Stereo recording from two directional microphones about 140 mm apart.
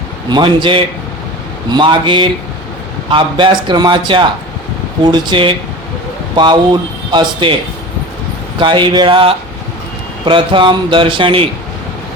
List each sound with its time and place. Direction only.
0.3 s a man's voice: 35° right (ahead or behind)
8.5 s a man's voice: 35° right (ahead or behind)